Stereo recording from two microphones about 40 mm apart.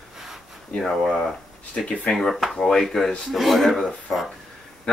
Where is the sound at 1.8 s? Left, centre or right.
Left.